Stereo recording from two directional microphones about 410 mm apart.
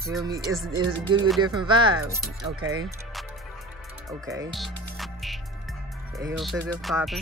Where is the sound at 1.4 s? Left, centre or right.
Centre.